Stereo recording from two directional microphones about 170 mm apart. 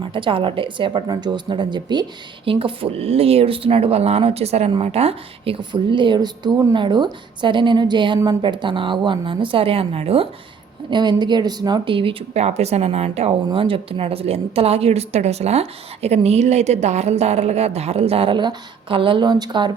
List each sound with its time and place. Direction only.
0.0 s a woman's voice: 30° right (ahead or behind)